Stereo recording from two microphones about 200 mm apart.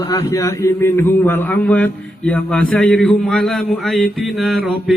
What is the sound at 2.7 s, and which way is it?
Mantra, 5° left (ahead or behind).